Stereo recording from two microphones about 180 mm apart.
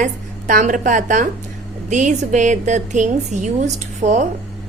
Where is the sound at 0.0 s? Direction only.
45° right (ahead or behind).